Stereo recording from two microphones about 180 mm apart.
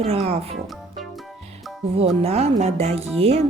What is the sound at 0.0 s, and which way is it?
Speech, 35° right (ahead or behind).